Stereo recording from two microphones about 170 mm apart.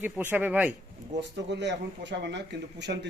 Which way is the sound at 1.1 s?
90° right.